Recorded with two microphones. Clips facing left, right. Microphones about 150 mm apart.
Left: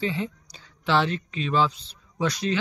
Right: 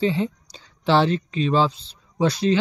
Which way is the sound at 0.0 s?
30° right (ahead or behind).